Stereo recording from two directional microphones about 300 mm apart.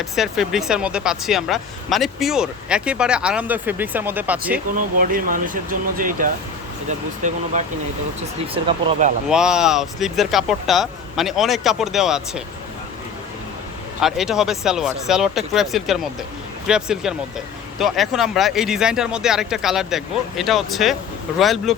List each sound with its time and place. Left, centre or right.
0.0 s speech: centre
4.7 s speech: right
9.3 s speech: centre
14.0 s speech: centre